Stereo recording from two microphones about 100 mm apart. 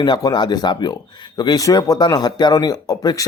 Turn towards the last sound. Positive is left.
turn(degrees=40)  # may be behind; listen again after turning